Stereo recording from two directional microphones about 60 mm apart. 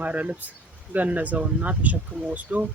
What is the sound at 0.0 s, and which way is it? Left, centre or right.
Speech, right.